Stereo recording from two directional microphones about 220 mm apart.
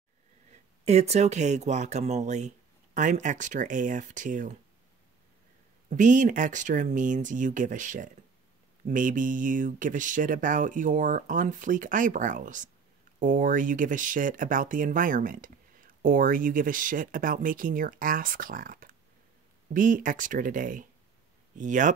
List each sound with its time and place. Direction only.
0.5 s speech: 30° right (ahead or behind)
5.9 s speech: 35° right (ahead or behind)